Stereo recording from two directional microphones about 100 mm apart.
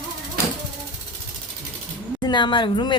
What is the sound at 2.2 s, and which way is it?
Speech, 50° left (ahead or behind).